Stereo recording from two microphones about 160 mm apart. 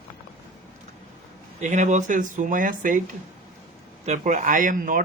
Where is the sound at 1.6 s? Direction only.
50° right (ahead or behind).